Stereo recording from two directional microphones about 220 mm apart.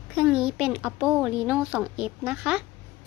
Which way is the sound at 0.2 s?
5° right (ahead or behind).